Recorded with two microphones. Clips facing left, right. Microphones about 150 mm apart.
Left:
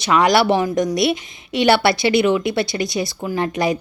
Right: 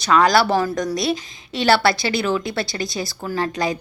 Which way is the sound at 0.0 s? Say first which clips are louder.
Left 1 dB; 20° left (ahead or behind).